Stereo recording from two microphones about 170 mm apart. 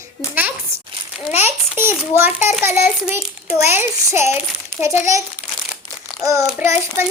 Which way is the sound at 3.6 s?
15° right (ahead or behind).